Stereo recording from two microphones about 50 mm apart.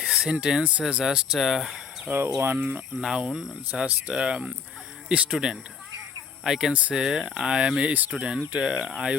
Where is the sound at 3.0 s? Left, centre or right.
Centre.